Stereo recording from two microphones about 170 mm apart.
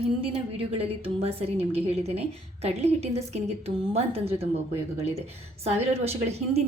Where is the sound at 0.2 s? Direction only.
35° right (ahead or behind).